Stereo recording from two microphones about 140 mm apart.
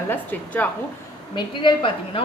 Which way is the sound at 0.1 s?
10° left (ahead or behind).